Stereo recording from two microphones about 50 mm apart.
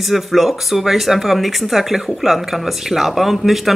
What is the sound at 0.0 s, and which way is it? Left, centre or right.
Speech, centre.